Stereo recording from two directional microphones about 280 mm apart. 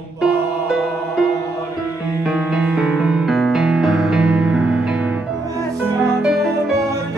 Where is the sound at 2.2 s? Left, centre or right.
Centre.